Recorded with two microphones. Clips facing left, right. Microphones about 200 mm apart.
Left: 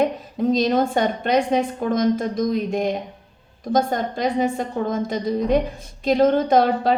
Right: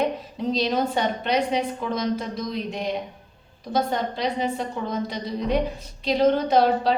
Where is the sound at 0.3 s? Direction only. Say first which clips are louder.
Left 6 dB; 50° left (ahead or behind).